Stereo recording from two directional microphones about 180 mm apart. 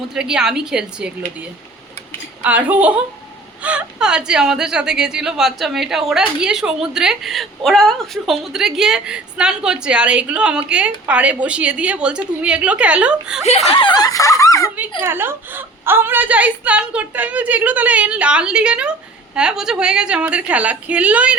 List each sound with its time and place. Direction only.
0.1 s a woman's voice: 5° right (ahead or behind)
13.7 s speech: 30° left (ahead or behind)
15.0 s a woman's voice: 10° right (ahead or behind)